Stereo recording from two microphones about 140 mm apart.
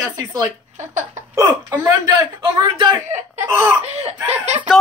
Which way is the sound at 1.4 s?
15° right (ahead or behind).